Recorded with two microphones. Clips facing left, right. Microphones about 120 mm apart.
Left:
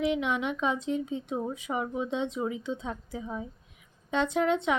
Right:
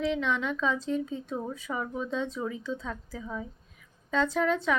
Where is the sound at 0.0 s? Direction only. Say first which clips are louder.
Left 1 dB; 15° left (ahead or behind).